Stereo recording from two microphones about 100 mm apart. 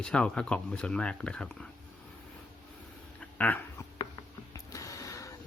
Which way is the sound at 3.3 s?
15° left (ahead or behind).